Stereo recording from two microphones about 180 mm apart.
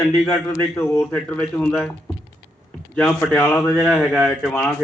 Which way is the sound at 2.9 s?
5° left (ahead or behind).